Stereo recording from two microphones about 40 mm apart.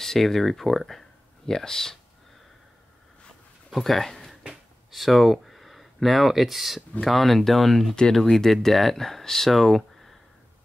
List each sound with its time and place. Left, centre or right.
0.0 s speech: centre
3.7 s speech: centre